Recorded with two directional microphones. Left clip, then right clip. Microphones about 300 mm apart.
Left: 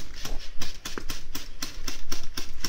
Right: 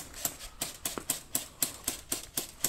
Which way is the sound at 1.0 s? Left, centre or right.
Centre.